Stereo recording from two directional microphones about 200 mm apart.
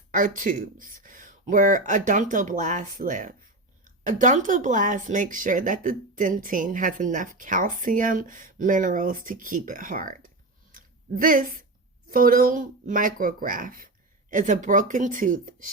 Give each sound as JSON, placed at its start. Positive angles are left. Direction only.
{"t": 0.1, "sound": "speech", "side_deg": -40}
{"t": 10.7, "sound": "a sound", "side_deg": -45}
{"t": 12.0, "sound": "speech", "side_deg": -45}